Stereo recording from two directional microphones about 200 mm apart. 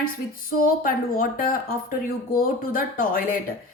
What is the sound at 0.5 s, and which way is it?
Speech, 45° left (ahead or behind).